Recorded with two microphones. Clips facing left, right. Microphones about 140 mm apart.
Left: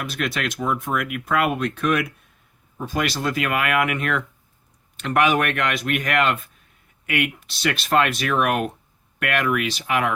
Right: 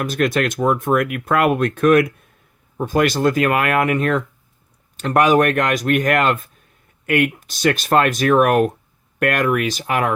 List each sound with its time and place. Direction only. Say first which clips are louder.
0.0 s speech: right 8 dB; 45° right (ahead or behind)